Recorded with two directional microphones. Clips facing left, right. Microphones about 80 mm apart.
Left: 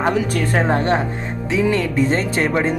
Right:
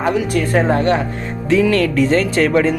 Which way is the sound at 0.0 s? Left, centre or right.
Left.